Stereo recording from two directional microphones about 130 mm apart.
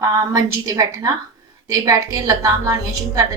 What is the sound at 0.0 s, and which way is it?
A woman's voice, 25° right (ahead or behind).